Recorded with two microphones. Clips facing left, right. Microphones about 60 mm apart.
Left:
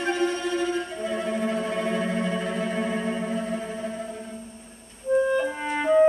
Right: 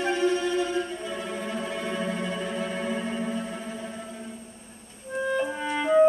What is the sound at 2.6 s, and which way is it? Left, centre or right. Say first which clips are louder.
Organ: left 3 dB; centre.